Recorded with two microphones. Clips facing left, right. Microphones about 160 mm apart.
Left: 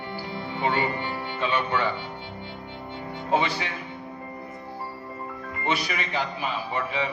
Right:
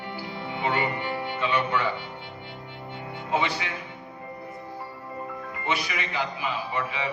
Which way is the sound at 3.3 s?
35° left (ahead or behind).